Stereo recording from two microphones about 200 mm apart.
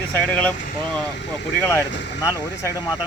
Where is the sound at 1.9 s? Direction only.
60° left (ahead or behind).